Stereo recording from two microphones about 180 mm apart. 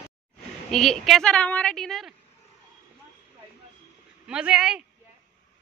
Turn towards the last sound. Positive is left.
turn(degrees=-5)  # may be behind; listen again after turning